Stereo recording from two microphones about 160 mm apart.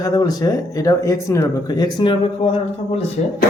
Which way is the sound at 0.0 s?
25° left (ahead or behind).